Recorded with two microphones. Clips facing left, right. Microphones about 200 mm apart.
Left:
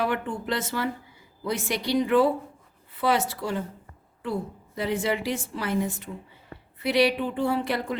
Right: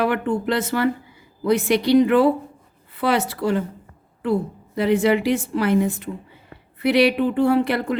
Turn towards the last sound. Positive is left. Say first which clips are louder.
# right 7 dB
turn(degrees=-65)  # may be behind; listen again after turning